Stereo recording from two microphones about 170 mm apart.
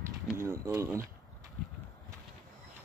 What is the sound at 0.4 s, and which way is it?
Speech, 15° right (ahead or behind).